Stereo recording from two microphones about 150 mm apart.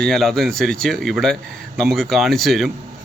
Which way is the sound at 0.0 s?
Centre (ahead or behind).